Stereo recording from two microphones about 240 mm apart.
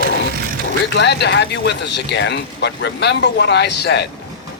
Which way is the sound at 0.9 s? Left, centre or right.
Left.